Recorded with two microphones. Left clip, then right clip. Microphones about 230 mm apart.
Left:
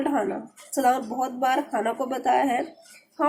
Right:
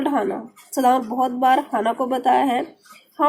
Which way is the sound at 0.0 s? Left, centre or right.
Right.